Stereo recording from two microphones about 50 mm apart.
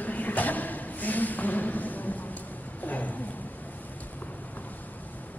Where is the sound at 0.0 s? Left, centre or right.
Left.